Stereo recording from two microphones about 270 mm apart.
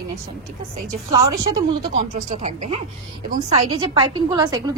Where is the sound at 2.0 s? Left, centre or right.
Right.